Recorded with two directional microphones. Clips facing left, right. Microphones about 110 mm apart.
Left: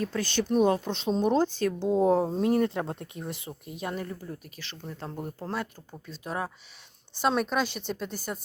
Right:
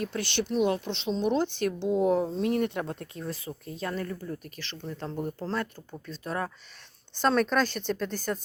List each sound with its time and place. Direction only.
0.0 s speech: 40° left (ahead or behind)
1.9 s speech: 30° left (ahead or behind); by 8.4 s 10° left (ahead or behind)